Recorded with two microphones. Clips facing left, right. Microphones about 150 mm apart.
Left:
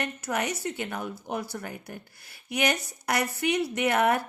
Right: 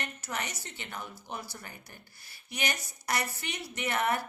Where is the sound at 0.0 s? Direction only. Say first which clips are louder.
Left 8 dB; 55° left (ahead or behind).